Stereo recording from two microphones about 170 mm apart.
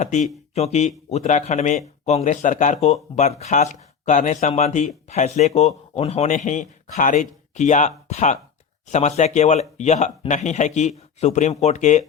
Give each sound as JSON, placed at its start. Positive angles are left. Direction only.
{"t": 0.0, "sound": "speech", "side_deg": 45}